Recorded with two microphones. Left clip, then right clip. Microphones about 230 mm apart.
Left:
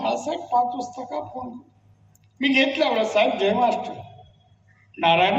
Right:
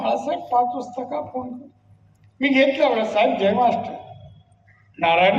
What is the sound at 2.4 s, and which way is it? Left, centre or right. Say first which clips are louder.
A woman's voice: right 3 dB; left.